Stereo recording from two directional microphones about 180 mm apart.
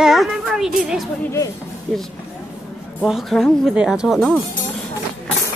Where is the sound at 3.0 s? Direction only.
Centre (ahead or behind).